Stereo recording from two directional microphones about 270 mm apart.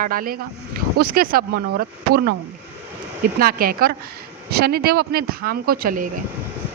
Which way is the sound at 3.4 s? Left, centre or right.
Right.